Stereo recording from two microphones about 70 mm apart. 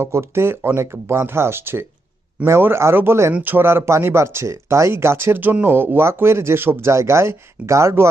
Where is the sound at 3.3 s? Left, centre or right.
Right.